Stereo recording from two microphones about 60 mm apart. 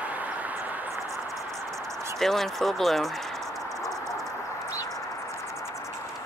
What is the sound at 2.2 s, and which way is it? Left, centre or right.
Speech, centre.